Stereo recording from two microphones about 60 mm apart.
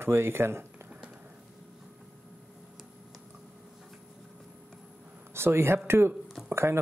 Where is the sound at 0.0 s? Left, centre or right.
Right.